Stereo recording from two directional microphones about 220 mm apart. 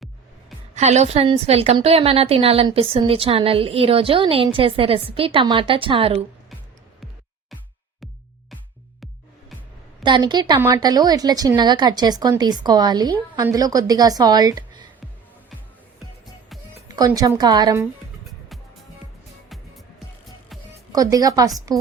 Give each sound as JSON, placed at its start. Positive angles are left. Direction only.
{"t": 0.8, "sound": "a woman's voice", "side_deg": -30}
{"t": 10.0, "sound": "a woman's voice", "side_deg": -20}
{"t": 16.9, "sound": "a woman's voice", "side_deg": -15}
{"t": 20.9, "sound": "a woman's voice", "side_deg": -15}